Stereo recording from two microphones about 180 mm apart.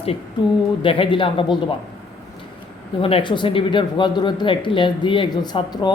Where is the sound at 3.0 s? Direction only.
30° left (ahead or behind).